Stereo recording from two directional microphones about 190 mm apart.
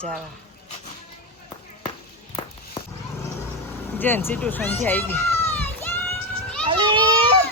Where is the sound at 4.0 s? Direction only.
10° left (ahead or behind).